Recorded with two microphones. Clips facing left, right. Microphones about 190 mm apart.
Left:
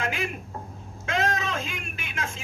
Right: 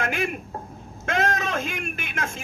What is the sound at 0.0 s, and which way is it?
A man's voice, 55° right (ahead or behind).